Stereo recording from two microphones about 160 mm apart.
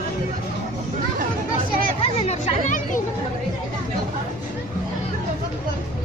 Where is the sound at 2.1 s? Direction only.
45° left (ahead or behind).